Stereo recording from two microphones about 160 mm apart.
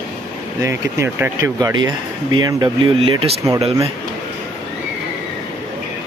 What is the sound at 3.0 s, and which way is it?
Speech, 35° right (ahead or behind).